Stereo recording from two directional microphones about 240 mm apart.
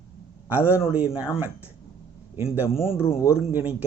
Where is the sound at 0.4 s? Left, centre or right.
Centre.